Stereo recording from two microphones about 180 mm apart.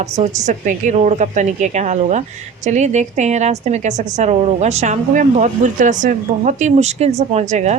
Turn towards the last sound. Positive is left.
turn(degrees=-40)  # may be behind; listen again after turning